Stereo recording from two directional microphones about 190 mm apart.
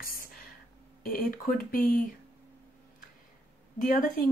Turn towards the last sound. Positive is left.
turn(degrees=45)  # may be behind; listen again after turning